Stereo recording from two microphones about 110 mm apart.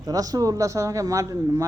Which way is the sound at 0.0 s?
35° right (ahead or behind).